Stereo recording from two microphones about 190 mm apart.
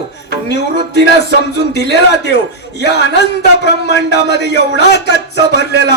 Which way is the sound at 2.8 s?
65° left (ahead or behind).